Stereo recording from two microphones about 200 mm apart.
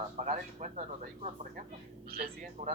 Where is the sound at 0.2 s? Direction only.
40° right (ahead or behind).